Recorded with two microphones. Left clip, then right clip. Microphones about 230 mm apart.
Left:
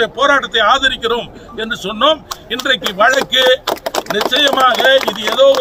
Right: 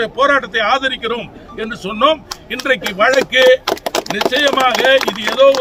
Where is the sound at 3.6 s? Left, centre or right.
Left.